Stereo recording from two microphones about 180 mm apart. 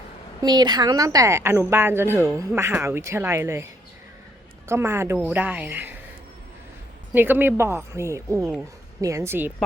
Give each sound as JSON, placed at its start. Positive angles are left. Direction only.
{"t": 0.4, "sound": "speech", "side_deg": -25}
{"t": 4.7, "sound": "speech", "side_deg": -15}
{"t": 7.1, "sound": "speech", "side_deg": -10}
{"t": 8.4, "sound": "speech", "side_deg": 0}
{"t": 9.0, "sound": "speech", "side_deg": -15}